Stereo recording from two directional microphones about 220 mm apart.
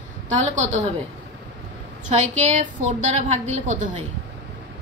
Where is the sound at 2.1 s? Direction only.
35° right (ahead or behind).